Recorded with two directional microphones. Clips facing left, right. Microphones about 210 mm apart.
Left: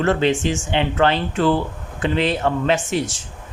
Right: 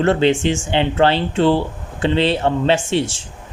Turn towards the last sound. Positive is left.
turn(degrees=-30)  # may be behind; listen again after turning